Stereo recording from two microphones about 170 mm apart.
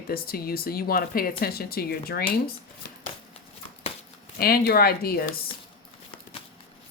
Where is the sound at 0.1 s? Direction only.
60° left (ahead or behind).